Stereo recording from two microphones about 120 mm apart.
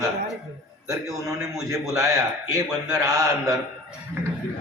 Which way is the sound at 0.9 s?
30° right (ahead or behind).